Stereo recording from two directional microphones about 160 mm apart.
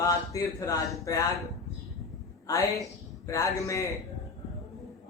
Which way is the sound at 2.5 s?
20° left (ahead or behind).